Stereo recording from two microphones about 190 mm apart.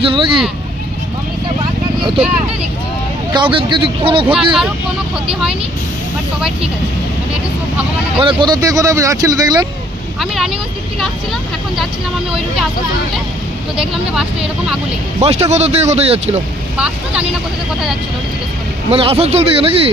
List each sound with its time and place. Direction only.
0.0 s speech: 30° right (ahead or behind)
3.3 s speech: 25° right (ahead or behind)
4.4 s speech: 5° right (ahead or behind)
8.2 s speech: 25° right (ahead or behind)
10.2 s speech: centre (ahead or behind)
13.7 s speech: 5° right (ahead or behind)
15.2 s speech: 35° right (ahead or behind)
16.7 s speech: 5° right (ahead or behind)
18.9 s speech: 30° right (ahead or behind)